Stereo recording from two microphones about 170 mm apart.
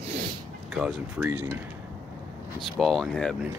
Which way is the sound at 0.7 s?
5° right (ahead or behind).